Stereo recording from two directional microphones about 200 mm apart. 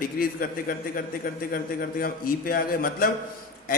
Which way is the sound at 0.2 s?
45° left (ahead or behind).